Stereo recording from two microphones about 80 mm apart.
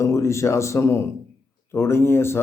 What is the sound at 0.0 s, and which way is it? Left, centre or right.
Speech, left.